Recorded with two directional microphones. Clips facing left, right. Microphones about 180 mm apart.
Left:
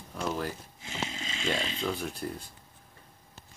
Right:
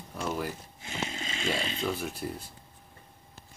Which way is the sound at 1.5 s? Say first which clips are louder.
Even; 5° right (ahead or behind).